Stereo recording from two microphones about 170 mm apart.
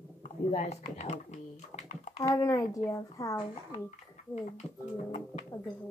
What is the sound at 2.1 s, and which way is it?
Speech, 20° left (ahead or behind).